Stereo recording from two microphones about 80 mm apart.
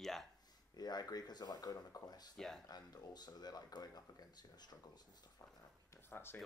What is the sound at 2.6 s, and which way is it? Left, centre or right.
Speech, left.